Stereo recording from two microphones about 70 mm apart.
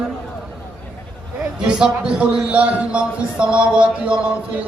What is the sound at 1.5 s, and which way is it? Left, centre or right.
Speech, centre.